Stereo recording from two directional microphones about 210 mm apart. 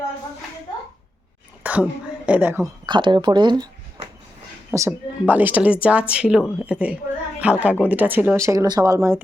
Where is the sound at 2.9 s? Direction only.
20° right (ahead or behind).